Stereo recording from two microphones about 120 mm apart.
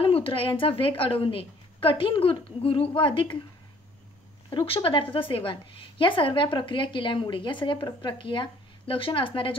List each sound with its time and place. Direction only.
0.0 s a woman's voice: 50° left (ahead or behind)
4.5 s a woman's voice: 45° left (ahead or behind)